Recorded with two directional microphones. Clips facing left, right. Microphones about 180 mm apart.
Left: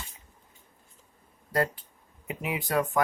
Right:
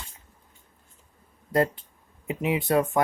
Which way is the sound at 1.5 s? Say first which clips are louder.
Right 4 dB; 25° right (ahead or behind).